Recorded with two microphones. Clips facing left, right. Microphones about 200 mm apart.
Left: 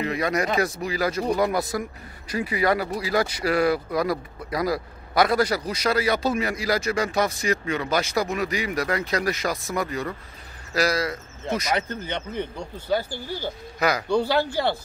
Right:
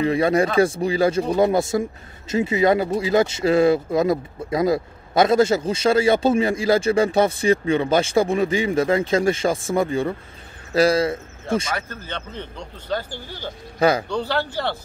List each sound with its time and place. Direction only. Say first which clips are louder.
0.0 s a man's voice: right 6 dB; 30° right (ahead or behind)
11.7 s speech: left 3 dB; 20° left (ahead or behind)
13.7 s a man's voice: right 6 dB; 30° right (ahead or behind)
14.0 s speech: left 2 dB; 10° left (ahead or behind)